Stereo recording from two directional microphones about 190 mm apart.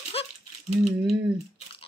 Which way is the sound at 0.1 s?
30° left (ahead or behind).